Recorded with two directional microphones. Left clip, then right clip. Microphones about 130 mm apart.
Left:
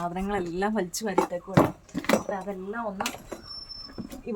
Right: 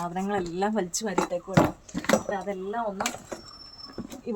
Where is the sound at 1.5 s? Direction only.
45° right (ahead or behind).